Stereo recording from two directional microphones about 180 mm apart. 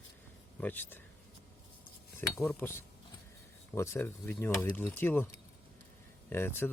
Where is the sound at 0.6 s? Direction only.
10° left (ahead or behind).